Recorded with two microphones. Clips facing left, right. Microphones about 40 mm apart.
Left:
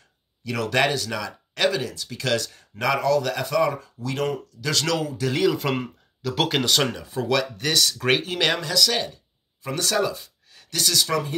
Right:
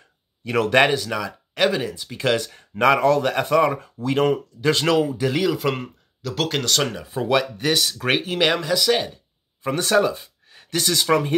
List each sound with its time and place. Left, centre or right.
0.4 s speech: right
0.9 s speech: centre
5.3 s speech: centre
7.0 s speech: centre; by 11.3 s right